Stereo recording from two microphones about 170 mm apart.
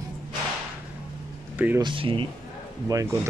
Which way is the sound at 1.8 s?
30° right (ahead or behind).